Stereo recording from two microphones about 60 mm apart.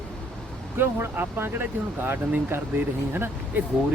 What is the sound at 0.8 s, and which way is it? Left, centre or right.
Speech, right.